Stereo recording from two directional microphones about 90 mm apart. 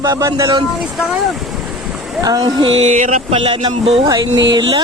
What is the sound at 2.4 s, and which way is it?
Speech, 90° right.